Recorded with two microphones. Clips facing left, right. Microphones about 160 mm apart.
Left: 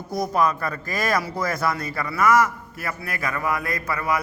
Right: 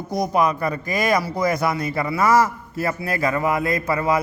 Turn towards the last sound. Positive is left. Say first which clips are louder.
# right 5 dB
turn(degrees=-25)  # may be behind; listen again after turning